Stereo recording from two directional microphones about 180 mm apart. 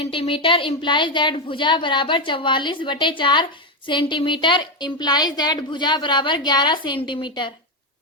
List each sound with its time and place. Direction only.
0.0 s a woman's voice: 30° left (ahead or behind)